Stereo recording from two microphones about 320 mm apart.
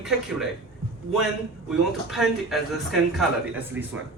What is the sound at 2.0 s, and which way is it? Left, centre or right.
Speech, centre.